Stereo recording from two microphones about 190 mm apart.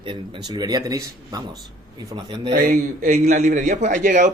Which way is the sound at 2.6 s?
50° right (ahead or behind).